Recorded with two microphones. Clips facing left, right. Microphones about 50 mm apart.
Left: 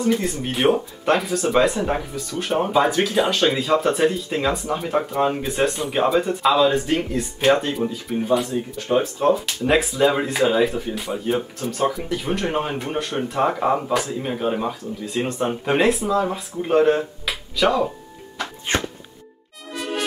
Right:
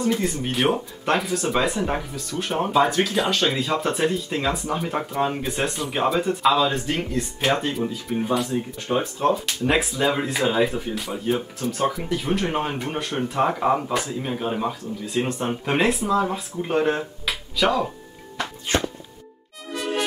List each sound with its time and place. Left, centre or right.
0.0 s speech: centre
8.5 s speech: centre
9.2 s speech: centre
18.7 s music: left
19.7 s music: centre